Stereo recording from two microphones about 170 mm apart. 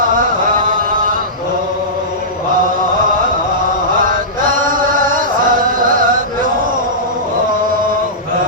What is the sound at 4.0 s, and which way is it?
Chant, 55° right (ahead or behind).